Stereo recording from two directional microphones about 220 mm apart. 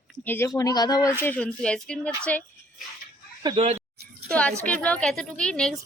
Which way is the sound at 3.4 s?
25° right (ahead or behind).